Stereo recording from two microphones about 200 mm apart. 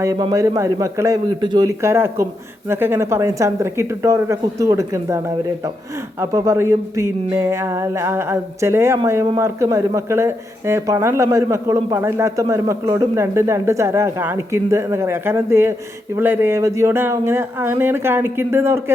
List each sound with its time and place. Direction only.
0.0 s speech: 20° right (ahead or behind)